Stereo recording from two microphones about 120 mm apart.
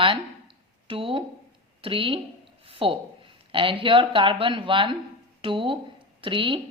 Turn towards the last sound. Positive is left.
turn(degrees=-45)  # may be behind; listen again after turning